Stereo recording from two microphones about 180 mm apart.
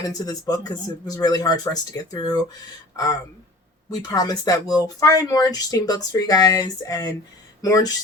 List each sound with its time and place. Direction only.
0.0 s speech: 20° left (ahead or behind)